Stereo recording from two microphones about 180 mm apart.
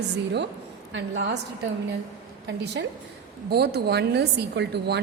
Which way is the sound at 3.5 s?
65° right (ahead or behind).